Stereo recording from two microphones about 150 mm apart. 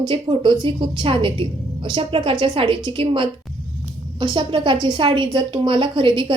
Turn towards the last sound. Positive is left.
turn(degrees=-35)  # may be behind; listen again after turning